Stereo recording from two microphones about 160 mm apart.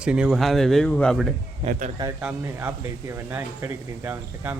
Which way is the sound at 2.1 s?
10° right (ahead or behind).